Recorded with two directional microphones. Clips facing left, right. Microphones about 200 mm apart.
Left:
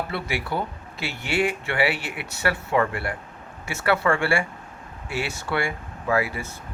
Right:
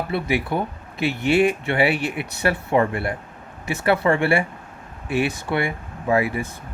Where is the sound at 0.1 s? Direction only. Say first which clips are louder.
Right 5 dB; 20° right (ahead or behind).